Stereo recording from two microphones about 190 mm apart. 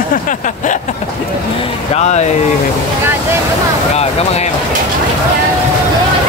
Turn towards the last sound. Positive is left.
turn(degrees=35)  # may be behind; listen again after turning